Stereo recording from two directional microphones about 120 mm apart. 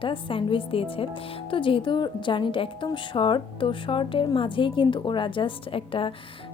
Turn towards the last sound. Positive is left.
turn(degrees=45)  # may be behind; listen again after turning